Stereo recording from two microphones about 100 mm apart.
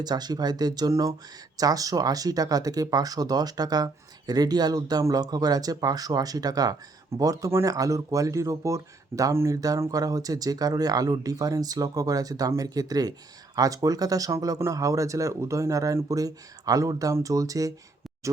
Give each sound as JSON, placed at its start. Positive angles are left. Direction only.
{"t": 0.0, "sound": "speech", "side_deg": -40}